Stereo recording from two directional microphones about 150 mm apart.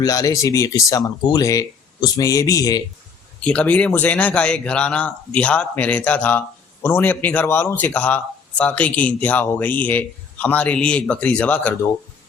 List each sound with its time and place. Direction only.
0.0 s speech: 25° left (ahead or behind)
3.4 s speech: 10° left (ahead or behind)